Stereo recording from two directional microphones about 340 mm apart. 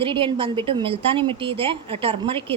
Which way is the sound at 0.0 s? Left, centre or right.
Centre.